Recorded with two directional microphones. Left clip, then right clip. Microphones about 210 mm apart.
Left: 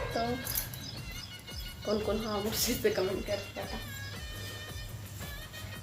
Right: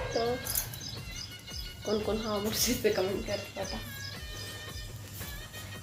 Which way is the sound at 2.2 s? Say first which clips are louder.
Right 2 dB; 20° right (ahead or behind).